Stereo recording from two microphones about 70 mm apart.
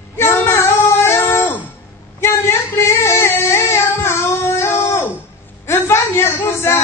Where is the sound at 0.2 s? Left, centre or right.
Left.